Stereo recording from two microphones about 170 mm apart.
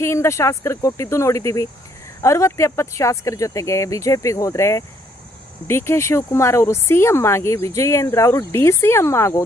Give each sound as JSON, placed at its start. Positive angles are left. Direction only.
{"t": 0.0, "sound": "speech", "side_deg": 15}